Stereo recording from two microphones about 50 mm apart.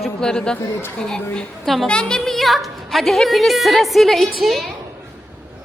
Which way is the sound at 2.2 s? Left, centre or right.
Centre.